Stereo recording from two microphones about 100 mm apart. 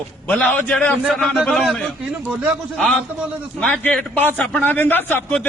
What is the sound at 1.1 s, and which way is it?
A man's voice, centre (ahead or behind).